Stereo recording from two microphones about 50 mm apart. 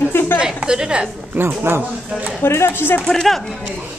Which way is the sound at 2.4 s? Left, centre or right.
Left.